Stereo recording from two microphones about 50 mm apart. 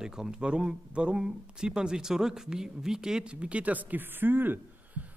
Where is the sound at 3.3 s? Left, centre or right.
Right.